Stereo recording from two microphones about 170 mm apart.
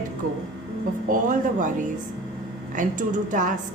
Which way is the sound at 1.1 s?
50° right (ahead or behind).